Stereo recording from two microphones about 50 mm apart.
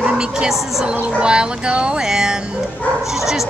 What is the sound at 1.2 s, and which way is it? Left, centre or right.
A woman's voice, centre.